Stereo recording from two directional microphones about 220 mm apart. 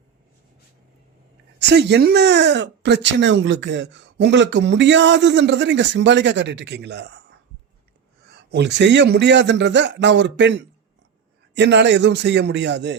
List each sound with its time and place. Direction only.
1.5 s speech: 50° right (ahead or behind)
8.3 s speech: 45° right (ahead or behind)